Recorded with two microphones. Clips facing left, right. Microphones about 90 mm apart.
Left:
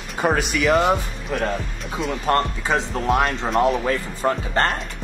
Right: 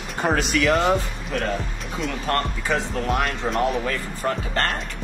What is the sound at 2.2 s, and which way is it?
Speech, 20° left (ahead or behind).